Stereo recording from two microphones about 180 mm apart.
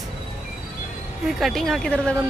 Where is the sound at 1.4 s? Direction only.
Centre (ahead or behind).